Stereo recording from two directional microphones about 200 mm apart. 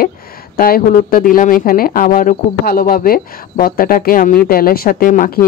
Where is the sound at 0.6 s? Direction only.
45° left (ahead or behind).